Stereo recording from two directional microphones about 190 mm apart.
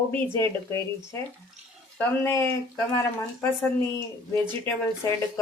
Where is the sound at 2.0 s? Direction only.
10° left (ahead or behind).